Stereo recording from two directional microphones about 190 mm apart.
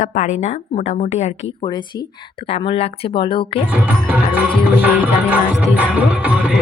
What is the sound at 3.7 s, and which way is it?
Music, 10° right (ahead or behind).